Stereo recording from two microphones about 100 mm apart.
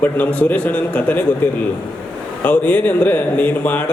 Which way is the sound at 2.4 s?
15° left (ahead or behind).